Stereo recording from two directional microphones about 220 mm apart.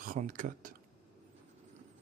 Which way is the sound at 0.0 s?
40° right (ahead or behind).